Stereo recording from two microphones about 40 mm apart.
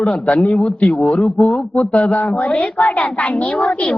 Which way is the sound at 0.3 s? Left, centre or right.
Left.